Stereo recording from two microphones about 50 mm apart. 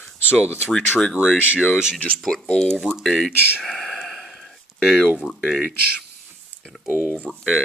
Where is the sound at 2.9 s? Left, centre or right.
Centre.